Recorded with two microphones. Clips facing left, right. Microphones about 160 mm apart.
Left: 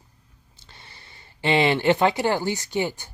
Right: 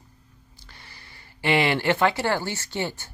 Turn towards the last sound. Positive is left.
turn(degrees=15)  # may be behind; listen again after turning